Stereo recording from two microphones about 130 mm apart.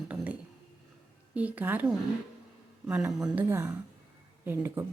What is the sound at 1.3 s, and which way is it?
Speech, 10° right (ahead or behind).